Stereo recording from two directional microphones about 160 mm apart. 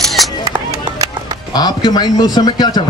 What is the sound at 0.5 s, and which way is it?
Music, 25° right (ahead or behind).